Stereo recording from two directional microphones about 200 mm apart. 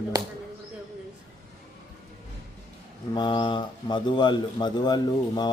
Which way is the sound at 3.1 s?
20° left (ahead or behind).